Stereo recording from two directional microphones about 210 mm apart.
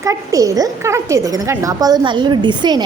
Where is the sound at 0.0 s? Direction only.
15° right (ahead or behind).